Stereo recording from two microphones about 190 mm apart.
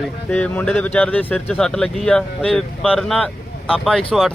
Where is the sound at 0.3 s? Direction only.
5° left (ahead or behind).